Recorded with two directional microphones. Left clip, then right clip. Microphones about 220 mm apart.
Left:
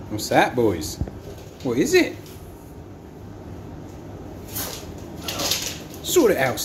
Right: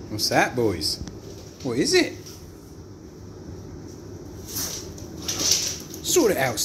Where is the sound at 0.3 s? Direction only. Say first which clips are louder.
Left 3 dB; 10° left (ahead or behind).